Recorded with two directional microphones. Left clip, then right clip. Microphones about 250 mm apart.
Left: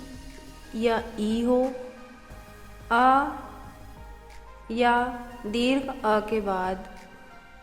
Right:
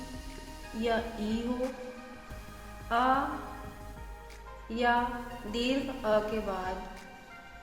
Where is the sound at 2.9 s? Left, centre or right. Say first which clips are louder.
Left 7 dB; left.